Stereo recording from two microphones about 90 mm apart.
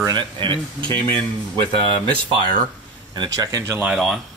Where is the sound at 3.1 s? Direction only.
50° right (ahead or behind).